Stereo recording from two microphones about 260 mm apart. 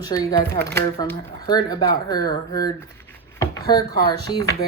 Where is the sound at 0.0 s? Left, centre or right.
Centre.